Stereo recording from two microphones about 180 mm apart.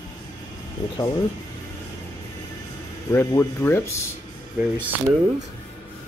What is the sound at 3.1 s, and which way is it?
Speech, 15° left (ahead or behind).